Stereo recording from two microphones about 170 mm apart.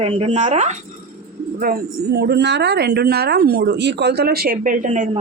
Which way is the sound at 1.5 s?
60° right (ahead or behind).